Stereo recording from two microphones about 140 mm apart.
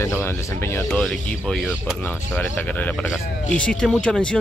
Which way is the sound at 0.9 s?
5° left (ahead or behind).